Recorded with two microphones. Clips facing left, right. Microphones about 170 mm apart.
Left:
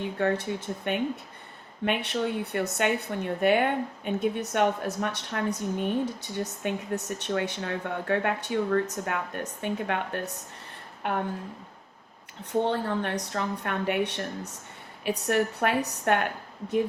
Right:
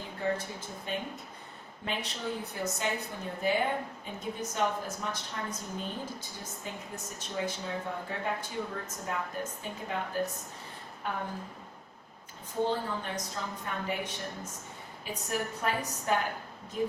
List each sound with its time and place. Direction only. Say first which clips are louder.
0.0 s a woman's voice: left 6 dB; 70° left (ahead or behind)
12.4 s a woman's voice: left 5 dB; 70° left (ahead or behind)